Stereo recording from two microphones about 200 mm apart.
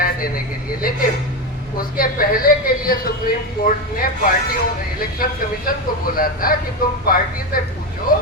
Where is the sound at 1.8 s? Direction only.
45° left (ahead or behind).